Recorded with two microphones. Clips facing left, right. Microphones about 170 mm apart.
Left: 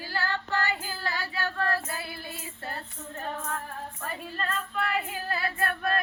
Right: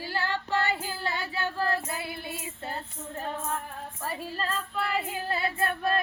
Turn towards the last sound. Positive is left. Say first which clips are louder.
# right 1 dB
turn(degrees=-25)  # may be behind; listen again after turning